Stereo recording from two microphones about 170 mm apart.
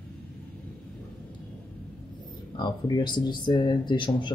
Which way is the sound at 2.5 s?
25° left (ahead or behind).